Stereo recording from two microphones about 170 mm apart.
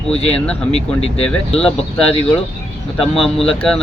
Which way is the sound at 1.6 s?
5° left (ahead or behind).